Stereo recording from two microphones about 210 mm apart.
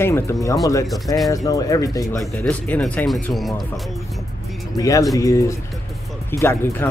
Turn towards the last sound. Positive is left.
turn(degrees=10)  # may be behind; listen again after turning